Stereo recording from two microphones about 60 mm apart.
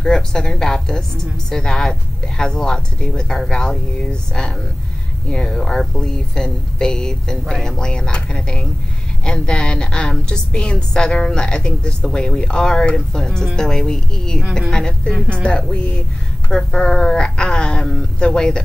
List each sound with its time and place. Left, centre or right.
0.0 s a woman's voice: centre